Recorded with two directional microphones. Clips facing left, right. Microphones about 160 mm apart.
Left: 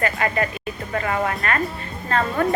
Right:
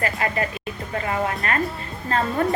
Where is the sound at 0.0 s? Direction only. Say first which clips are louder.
Left 2 dB; 30° right (ahead or behind).